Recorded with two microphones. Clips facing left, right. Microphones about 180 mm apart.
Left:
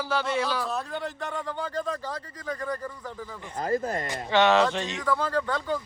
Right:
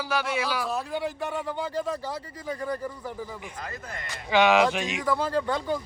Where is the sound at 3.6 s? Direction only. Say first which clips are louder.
Left 11 dB; 35° left (ahead or behind).